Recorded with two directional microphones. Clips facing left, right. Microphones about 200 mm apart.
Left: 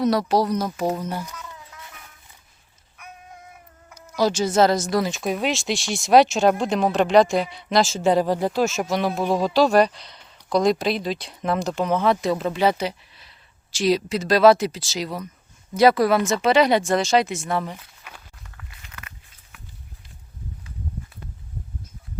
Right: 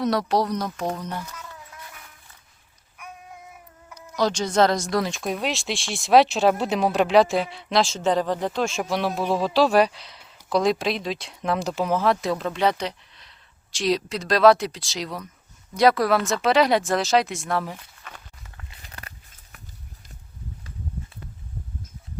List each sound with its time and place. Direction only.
0.0 s speech: centre (ahead or behind)
3.9 s speech: 5° left (ahead or behind)
18.0 s walk: 10° left (ahead or behind)
18.8 s a sound: 35° right (ahead or behind)